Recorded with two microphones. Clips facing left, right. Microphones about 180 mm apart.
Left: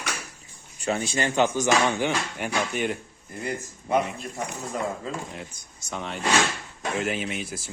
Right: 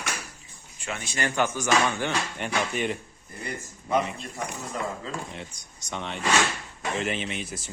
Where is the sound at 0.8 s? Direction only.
35° left (ahead or behind); by 2.5 s 15° left (ahead or behind).